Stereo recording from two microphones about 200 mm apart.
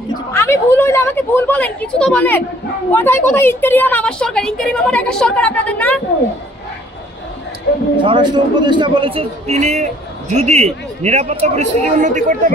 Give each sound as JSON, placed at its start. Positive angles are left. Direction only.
{"t": 0.1, "sound": "a woman's voice", "side_deg": 15}
{"t": 8.0, "sound": "a man's voice", "side_deg": -25}